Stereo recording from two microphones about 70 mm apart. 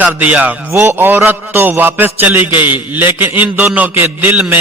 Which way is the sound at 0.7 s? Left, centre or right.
Right.